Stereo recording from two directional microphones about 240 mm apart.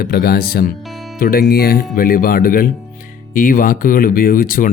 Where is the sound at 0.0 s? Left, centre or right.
Left.